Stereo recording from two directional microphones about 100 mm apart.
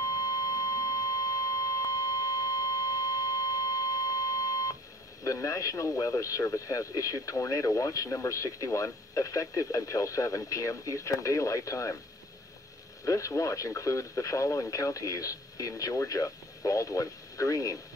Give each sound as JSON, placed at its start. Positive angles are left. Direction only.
{"t": 0.0, "sound": "a sound", "side_deg": 35}
{"t": 5.2, "sound": "speech", "side_deg": 35}
{"t": 13.0, "sound": "speech", "side_deg": 30}